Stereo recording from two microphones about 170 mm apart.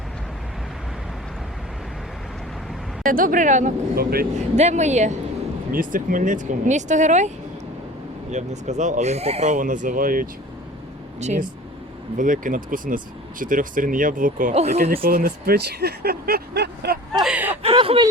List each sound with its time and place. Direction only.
3.0 s speech: 55° right (ahead or behind)
4.5 s speech: 40° right (ahead or behind)
8.3 s speech: 45° right (ahead or behind)
11.2 s speech: 45° right (ahead or behind)
15.0 s speech: 60° right (ahead or behind)
17.2 s a sound: 10° right (ahead or behind)
17.6 s speech: 35° right (ahead or behind)